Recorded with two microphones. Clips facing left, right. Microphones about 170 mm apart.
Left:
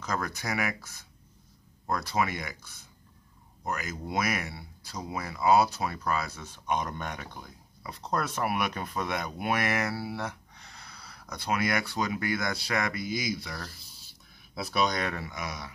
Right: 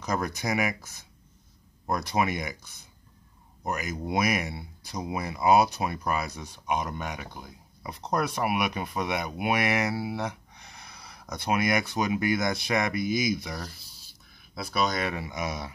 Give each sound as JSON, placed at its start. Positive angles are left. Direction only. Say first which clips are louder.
{"t": 0.0, "sound": "speech", "louder": "right 3 dB", "side_deg": -20}
{"t": 14.5, "sound": "speech", "louder": "even", "side_deg": 0}
{"t": 15.2, "sound": "speech", "louder": "right 5 dB", "side_deg": -20}